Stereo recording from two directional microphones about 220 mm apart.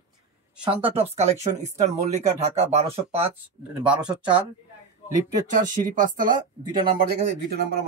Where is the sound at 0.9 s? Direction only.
30° right (ahead or behind).